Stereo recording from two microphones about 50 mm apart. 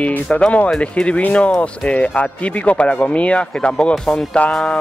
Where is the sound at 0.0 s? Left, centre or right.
Left.